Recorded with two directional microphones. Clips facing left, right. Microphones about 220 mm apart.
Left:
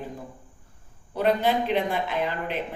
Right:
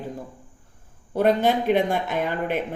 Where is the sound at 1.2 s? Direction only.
50° right (ahead or behind).